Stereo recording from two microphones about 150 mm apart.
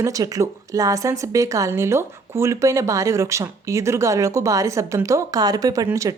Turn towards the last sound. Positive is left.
turn(degrees=-20)  # may be behind; listen again after turning